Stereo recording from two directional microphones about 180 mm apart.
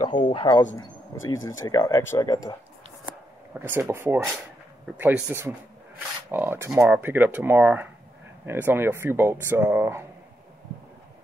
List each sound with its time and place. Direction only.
0.2 s speech: 30° left (ahead or behind)
1.4 s speech: 90° left
1.7 s speech: 20° left (ahead or behind)
3.5 s speech: 10° right (ahead or behind)